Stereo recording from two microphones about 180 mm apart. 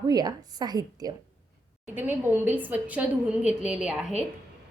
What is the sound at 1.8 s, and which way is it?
A woman's voice, 10° right (ahead or behind).